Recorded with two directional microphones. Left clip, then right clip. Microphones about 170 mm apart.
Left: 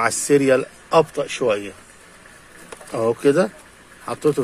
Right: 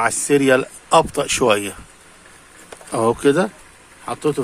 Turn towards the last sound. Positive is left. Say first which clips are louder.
# left 1 dB
turn(degrees=0)  # may be behind; listen again after turning